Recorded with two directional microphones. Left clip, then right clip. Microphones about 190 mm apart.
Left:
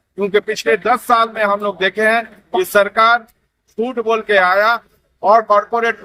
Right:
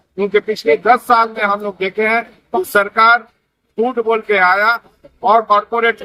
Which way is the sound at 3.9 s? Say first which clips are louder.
Left 2 dB; 25° left (ahead or behind).